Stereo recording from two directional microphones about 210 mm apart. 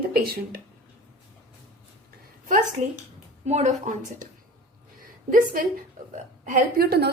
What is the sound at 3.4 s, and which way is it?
Speech, 35° right (ahead or behind).